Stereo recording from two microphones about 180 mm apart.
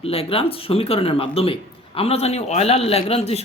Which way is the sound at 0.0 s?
30° left (ahead or behind).